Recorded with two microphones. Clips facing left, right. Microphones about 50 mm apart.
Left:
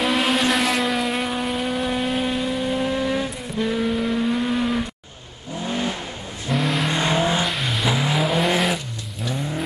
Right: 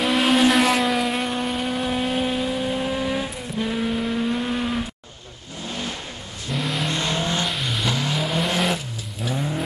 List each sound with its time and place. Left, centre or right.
0.0 s vehicle: centre
6.5 s vehicle: centre
6.9 s vehicle: centre
7.4 s vehicle: centre
7.9 s vehicle: centre
8.5 s vehicle: centre